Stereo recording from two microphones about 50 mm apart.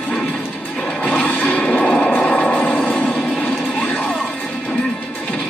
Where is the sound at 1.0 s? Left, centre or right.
Left.